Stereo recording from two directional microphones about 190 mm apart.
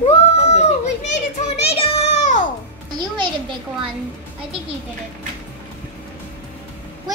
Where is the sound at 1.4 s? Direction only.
30° left (ahead or behind).